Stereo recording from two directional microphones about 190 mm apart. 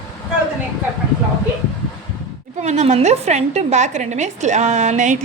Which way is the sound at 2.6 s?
35° right (ahead or behind).